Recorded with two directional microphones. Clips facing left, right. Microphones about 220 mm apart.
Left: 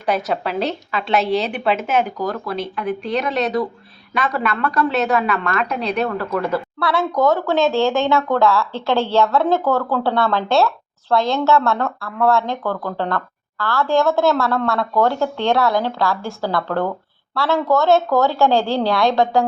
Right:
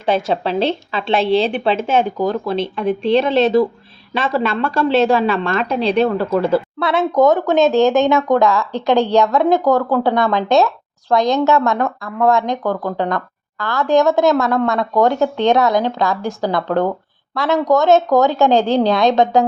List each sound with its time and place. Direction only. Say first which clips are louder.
0.0 s a woman's voice: right 3 dB; 25° right (ahead or behind)